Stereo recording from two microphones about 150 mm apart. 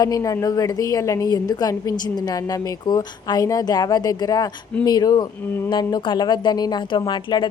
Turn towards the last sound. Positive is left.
turn(degrees=30)  # may be behind; listen again after turning